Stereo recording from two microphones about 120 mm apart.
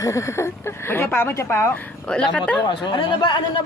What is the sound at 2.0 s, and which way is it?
Speech, 5° left (ahead or behind).